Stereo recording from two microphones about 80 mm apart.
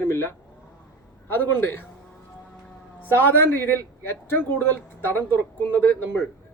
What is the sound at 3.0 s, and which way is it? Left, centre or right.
Speech, left.